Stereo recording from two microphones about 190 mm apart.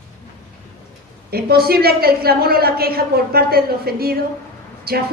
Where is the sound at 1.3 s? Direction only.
55° right (ahead or behind).